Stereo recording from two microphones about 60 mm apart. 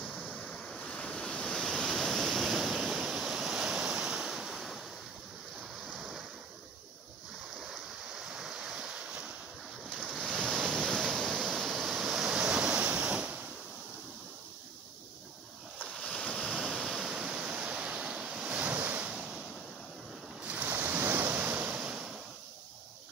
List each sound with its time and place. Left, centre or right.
0.0 s waves: centre
5.9 s waves: centre
7.6 s waves: centre
10.0 s waves: centre
10.3 s waves: centre; by 13.4 s right
16.0 s waves: centre
16.5 s waves: centre
17.1 s waterfall: centre
18.3 s waves: centre
20.4 s waves: right
21.7 s waves: centre